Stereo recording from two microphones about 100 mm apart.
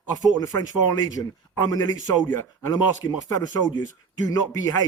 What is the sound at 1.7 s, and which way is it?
Speech, 30° left (ahead or behind).